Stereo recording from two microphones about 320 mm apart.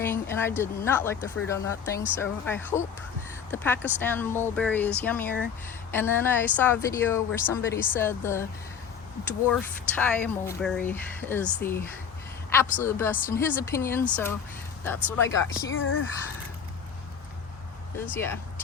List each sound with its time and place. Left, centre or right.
0.0 s a sound: centre
0.6 s a woman's voice: centre
12.8 s a woman's voice: centre
15.7 s speech: left
17.9 s a woman's voice: centre